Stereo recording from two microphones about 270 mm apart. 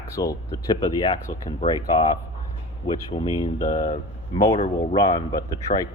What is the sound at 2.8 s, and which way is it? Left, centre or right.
Speech, centre.